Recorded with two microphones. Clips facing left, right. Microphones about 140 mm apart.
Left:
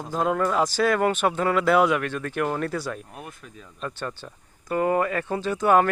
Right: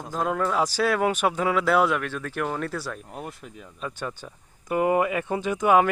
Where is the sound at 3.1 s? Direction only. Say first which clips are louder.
Right 4 dB; 25° right (ahead or behind).